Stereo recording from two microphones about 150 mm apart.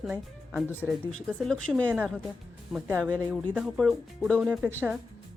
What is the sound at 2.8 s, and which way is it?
Speech, 15° right (ahead or behind).